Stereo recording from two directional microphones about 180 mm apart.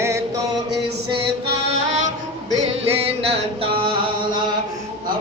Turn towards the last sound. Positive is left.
turn(degrees=-35)  # may be behind; listen again after turning